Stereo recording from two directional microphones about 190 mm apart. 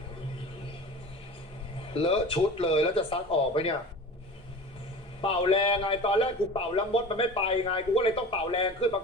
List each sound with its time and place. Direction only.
1.9 s a man's voice: 30° left (ahead or behind)
5.2 s a man's voice: 30° left (ahead or behind)